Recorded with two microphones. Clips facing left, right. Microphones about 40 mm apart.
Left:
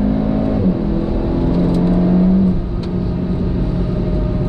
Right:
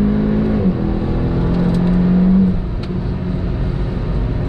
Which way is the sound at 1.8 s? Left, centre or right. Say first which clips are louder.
Left 1 dB; centre.